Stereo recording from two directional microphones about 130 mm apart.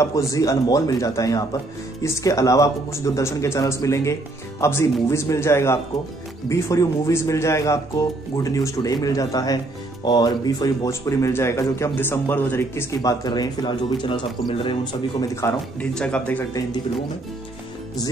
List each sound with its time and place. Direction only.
0.0 s speech: 25° left (ahead or behind); by 15.2 s 45° left (ahead or behind)
15.8 s speech: 10° left (ahead or behind)